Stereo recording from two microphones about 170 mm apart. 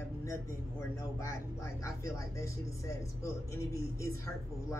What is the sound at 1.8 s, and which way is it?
Speech, 15° left (ahead or behind).